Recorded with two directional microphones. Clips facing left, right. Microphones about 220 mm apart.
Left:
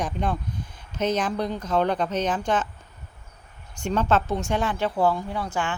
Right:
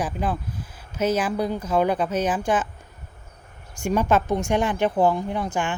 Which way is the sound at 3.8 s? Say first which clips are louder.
Right 2 dB; 10° right (ahead or behind).